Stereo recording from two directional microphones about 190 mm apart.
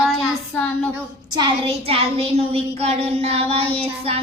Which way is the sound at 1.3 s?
30° right (ahead or behind).